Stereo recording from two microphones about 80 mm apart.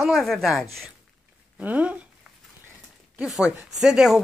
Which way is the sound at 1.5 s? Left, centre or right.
Centre.